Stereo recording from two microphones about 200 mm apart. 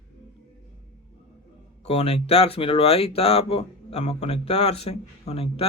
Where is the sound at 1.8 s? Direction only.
30° left (ahead or behind).